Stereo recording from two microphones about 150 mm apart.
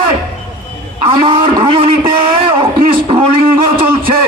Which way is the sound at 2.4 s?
35° right (ahead or behind).